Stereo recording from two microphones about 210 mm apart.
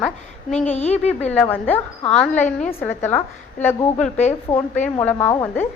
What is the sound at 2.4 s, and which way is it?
Speech, 35° left (ahead or behind).